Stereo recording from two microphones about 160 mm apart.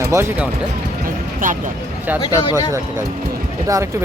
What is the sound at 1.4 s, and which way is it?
Speech, 55° right (ahead or behind).